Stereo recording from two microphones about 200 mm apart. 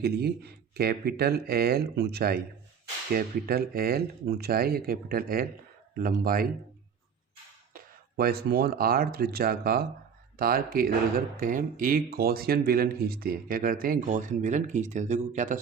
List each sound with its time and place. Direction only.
0.0 s speech: 55° right (ahead or behind)
7.7 s speech: 50° right (ahead or behind)